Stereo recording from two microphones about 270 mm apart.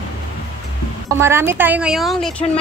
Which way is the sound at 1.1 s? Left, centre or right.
Centre.